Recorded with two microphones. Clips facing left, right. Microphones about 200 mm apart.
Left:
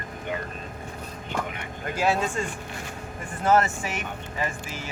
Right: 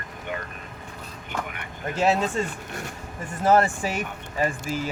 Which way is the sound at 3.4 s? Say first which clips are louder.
Right 2 dB; 35° right (ahead or behind).